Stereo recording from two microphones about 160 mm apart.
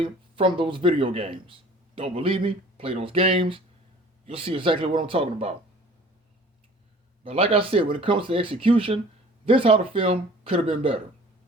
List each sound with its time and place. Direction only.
0.0 s speech: 35° right (ahead or behind)
7.3 s speech: 35° right (ahead or behind)